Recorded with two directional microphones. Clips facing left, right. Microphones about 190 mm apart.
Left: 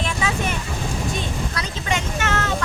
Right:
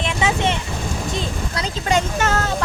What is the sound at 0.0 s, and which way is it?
Vehicle, 25° right (ahead or behind).